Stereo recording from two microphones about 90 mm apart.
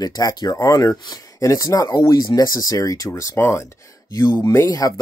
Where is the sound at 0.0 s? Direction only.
45° left (ahead or behind); by 4.6 s 30° left (ahead or behind).